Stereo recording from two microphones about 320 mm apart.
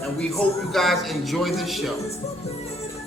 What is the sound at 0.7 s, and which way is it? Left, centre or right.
Speech, centre.